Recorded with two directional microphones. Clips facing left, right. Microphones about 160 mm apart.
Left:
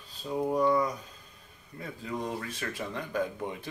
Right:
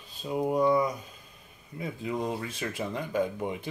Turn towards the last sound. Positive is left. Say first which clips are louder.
# right 3 dB
turn(degrees=-20)  # may be behind; listen again after turning